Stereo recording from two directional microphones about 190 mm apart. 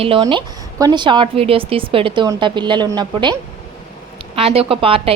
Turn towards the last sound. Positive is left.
turn(degrees=-30)  # may be behind; listen again after turning